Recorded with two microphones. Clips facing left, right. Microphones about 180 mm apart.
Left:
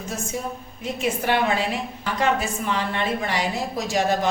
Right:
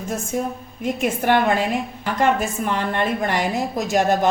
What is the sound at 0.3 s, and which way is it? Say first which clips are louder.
A woman's voice: right 5 dB; 50° right (ahead or behind).